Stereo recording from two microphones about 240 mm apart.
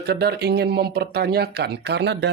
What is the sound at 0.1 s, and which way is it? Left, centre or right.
Speech, right.